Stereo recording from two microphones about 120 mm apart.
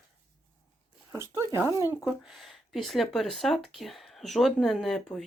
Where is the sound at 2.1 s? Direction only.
Centre (ahead or behind).